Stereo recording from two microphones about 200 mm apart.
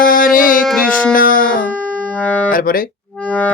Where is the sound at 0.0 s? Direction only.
45° left (ahead or behind).